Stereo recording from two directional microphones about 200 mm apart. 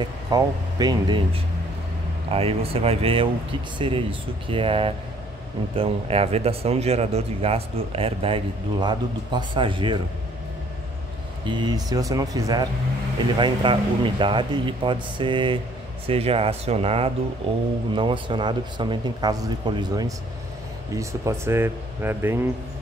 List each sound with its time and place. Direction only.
0.0 s speech: 20° right (ahead or behind)
2.3 s speech: 30° right (ahead or behind)
11.4 s speech: 20° right (ahead or behind)